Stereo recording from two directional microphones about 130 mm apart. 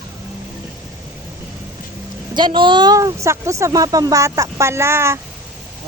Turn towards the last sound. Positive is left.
turn(degrees=-20)  # may be behind; listen again after turning